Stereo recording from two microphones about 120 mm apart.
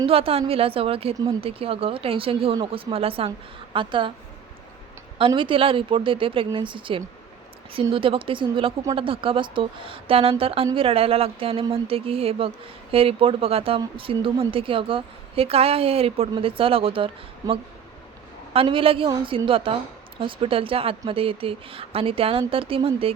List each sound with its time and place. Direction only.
0.0 s speech: 50° right (ahead or behind)
5.1 s speech: 45° right (ahead or behind)
18.5 s speech: 50° right (ahead or behind)